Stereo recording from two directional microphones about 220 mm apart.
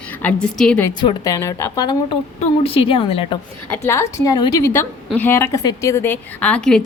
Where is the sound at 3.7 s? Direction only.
10° left (ahead or behind).